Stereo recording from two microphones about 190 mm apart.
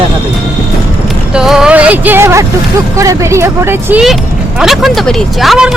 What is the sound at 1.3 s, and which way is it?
Speech, 5° right (ahead or behind).